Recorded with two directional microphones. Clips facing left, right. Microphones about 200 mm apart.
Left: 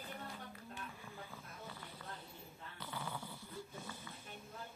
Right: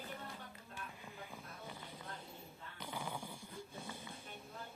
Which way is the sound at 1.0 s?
15° right (ahead or behind).